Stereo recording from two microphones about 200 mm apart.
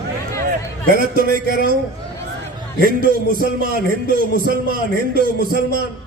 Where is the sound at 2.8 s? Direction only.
45° right (ahead or behind).